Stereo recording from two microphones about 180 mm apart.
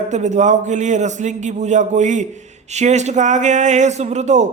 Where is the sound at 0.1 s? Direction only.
40° right (ahead or behind).